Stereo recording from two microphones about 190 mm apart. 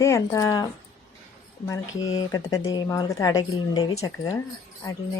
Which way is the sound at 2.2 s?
20° left (ahead or behind).